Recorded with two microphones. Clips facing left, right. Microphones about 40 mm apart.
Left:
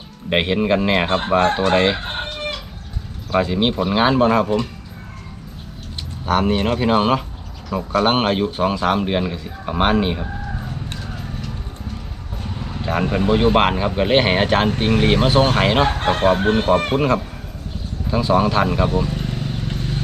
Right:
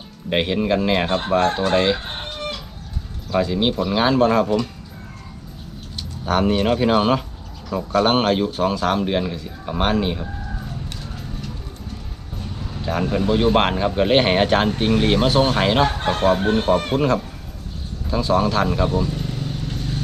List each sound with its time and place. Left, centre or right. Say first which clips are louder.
0.3 s speech: left 2 dB; centre
1.5 s chicken: left 2 dB; left
3.3 s speech: left 1 dB; left
6.2 s speech: even; centre
12.4 s vehicle: left 3 dB; left
12.9 s speech: left 2 dB; left
18.1 s vehicle: left 2 dB; centre